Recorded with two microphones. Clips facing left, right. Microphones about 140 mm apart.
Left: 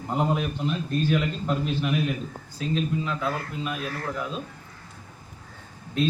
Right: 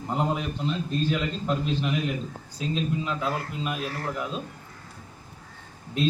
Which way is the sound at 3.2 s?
25° right (ahead or behind).